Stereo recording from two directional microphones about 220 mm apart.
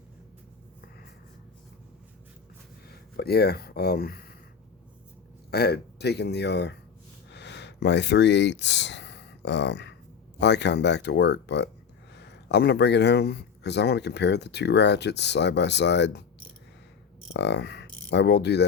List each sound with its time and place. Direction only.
3.2 s speech: 45° left (ahead or behind)
5.5 s speech: 45° left (ahead or behind)
7.3 s a sound: 50° left (ahead or behind)
10.4 s speech: 50° left (ahead or behind)
17.3 s speech: 50° left (ahead or behind)